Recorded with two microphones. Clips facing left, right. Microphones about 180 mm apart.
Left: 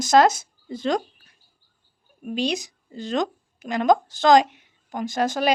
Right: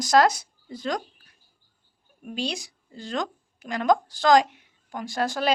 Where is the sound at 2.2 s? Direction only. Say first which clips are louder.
Left 6 dB; 20° left (ahead or behind).